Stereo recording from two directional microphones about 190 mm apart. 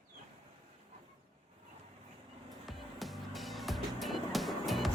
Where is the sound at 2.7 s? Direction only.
Centre (ahead or behind).